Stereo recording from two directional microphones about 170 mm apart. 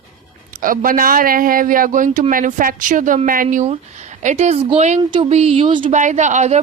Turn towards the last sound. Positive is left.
turn(degrees=-45)  # may be behind; listen again after turning